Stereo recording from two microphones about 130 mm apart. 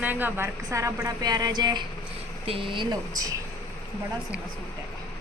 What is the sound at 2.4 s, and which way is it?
Speech, 45° right (ahead or behind).